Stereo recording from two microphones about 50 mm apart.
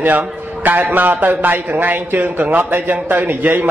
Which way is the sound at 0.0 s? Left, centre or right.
Right.